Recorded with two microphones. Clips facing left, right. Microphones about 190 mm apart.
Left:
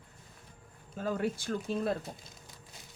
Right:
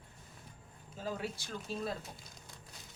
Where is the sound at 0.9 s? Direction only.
55° left (ahead or behind).